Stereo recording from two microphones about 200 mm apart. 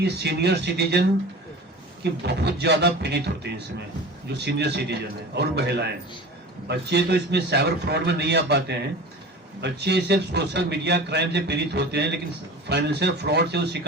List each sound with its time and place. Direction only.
0.0 s a man's voice: 55° right (ahead or behind)
2.2 s a man's voice: 55° right (ahead or behind)